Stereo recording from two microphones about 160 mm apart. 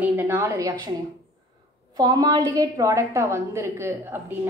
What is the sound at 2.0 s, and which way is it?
A woman's voice, 25° right (ahead or behind).